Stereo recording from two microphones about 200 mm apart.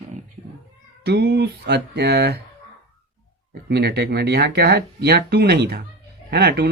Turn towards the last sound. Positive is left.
turn(degrees=-50)  # may be behind; listen again after turning